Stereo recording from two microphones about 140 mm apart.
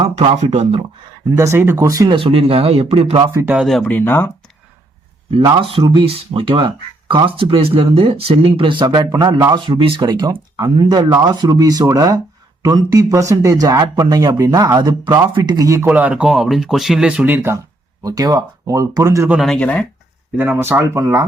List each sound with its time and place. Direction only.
0.0 s speech: 50° right (ahead or behind)
1.3 s a man's voice: 20° right (ahead or behind)
2.1 s speech: 40° right (ahead or behind)
3.3 s speech: 10° right (ahead or behind)
3.7 s speech: 5° left (ahead or behind)
5.3 s speech: 40° right (ahead or behind)
10.1 s a man's voice: 25° right (ahead or behind)
15.9 s a man's voice: 10° right (ahead or behind)
19.4 s speech: 5° left (ahead or behind)
20.3 s a man's voice: 15° right (ahead or behind)